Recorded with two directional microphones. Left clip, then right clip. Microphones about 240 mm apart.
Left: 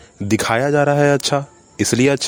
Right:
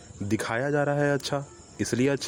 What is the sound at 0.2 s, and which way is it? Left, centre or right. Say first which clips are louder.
Speech: left 11 dB; left.